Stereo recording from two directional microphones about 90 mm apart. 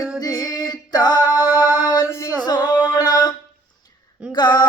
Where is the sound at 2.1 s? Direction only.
35° left (ahead or behind).